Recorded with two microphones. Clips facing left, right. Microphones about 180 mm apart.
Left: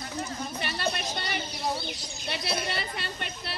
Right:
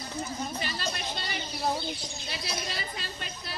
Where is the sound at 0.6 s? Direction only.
60° left (ahead or behind).